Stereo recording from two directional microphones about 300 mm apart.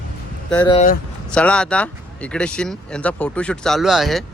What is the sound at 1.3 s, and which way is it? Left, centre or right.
Speech, centre.